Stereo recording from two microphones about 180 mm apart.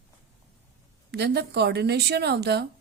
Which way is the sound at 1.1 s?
65° right (ahead or behind).